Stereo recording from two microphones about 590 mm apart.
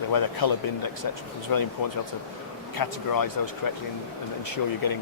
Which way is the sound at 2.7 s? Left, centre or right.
Left.